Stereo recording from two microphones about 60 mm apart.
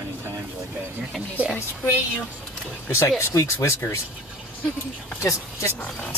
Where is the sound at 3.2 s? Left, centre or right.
Left.